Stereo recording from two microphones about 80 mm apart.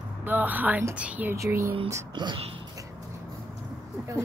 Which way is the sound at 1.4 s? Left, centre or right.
Right.